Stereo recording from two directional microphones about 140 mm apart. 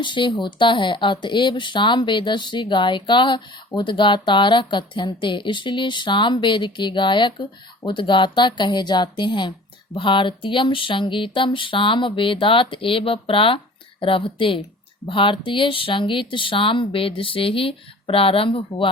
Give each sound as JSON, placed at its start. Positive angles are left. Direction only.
{"t": 0.0, "sound": "speech", "side_deg": 35}